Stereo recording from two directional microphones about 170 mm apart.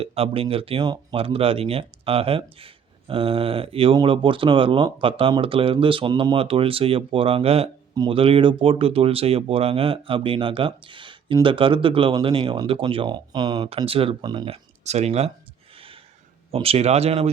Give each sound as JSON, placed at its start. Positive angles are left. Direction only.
{"t": 0.0, "sound": "speech", "side_deg": -35}
{"t": 15.7, "sound": "a sound", "side_deg": -30}
{"t": 16.5, "sound": "speech", "side_deg": -35}